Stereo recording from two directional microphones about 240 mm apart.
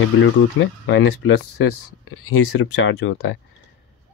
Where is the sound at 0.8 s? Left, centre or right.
Left.